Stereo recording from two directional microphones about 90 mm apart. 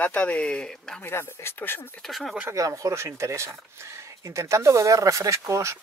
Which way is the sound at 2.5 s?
40° right (ahead or behind).